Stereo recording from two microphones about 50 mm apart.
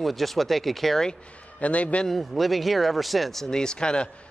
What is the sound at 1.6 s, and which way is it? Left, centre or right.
Speech, left.